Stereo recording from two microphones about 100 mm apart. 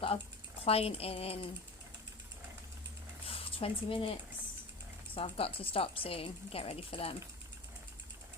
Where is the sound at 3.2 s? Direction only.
70° left (ahead or behind).